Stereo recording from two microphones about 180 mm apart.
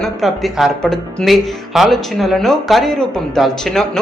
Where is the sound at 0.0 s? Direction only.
Centre (ahead or behind).